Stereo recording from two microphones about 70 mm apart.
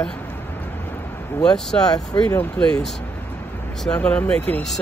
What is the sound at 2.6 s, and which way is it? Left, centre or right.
Speech, left.